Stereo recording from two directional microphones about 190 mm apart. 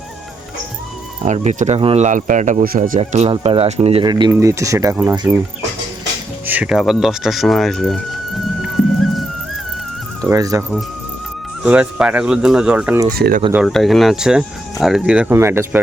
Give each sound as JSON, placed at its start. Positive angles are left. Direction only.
{"t": 1.2, "sound": "speech", "side_deg": -40}
{"t": 3.0, "sound": "speech", "side_deg": -35}
{"t": 6.4, "sound": "speech", "side_deg": -10}
{"t": 10.2, "sound": "speech", "side_deg": -15}
{"t": 11.6, "sound": "speech", "side_deg": -5}
{"t": 13.1, "sound": "speech", "side_deg": -55}
{"t": 13.5, "sound": "speech", "side_deg": 0}